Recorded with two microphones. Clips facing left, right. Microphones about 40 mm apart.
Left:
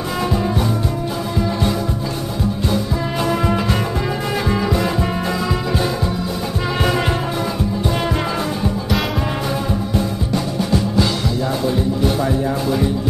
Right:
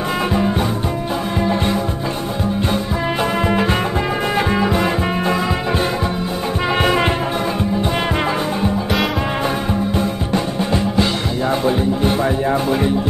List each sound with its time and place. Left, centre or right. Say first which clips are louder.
2.7 s music: right 1 dB; right
9.9 s music: right 1 dB; right